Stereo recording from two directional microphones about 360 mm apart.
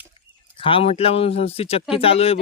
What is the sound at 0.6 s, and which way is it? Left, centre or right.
Speech, centre.